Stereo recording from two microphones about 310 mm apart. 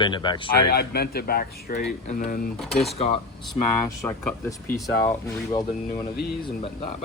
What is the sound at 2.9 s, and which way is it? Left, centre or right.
Speech, centre.